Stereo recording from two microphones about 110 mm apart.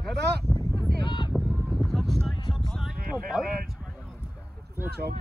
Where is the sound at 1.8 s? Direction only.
Centre (ahead or behind).